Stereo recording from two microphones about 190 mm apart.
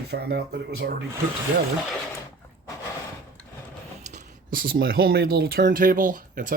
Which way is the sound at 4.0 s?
40° right (ahead or behind).